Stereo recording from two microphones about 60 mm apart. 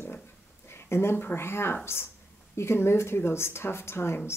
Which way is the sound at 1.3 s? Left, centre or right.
Left.